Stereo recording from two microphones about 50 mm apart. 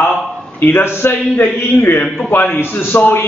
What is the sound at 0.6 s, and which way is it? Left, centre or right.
A man's voice, left.